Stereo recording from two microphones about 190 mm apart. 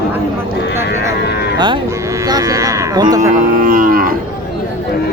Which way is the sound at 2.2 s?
20° right (ahead or behind).